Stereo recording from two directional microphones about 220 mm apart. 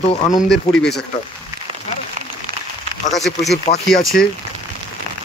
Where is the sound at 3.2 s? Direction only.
Centre (ahead or behind).